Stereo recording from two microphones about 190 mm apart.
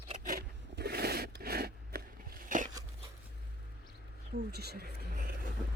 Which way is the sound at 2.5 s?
45° right (ahead or behind).